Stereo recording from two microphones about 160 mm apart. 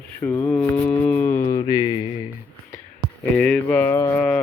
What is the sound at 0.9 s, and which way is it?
Music, 10° left (ahead or behind).